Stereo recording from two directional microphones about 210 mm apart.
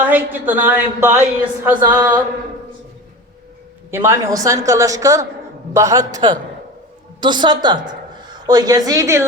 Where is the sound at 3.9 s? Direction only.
10° right (ahead or behind).